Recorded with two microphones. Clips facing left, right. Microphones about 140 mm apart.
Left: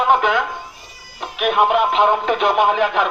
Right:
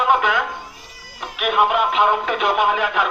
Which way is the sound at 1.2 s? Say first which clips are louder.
Left 2 dB; 25° left (ahead or behind).